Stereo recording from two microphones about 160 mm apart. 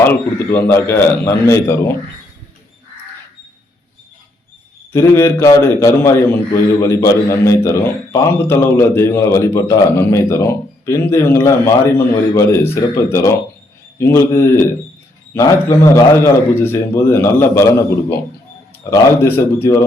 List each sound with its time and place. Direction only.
0.0 s a man's voice: 10° left (ahead or behind)
4.9 s a man's voice: 15° left (ahead or behind)
18.9 s a man's voice: 15° left (ahead or behind)